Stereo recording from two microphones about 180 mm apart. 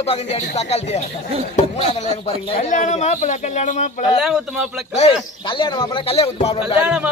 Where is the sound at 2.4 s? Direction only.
45° left (ahead or behind).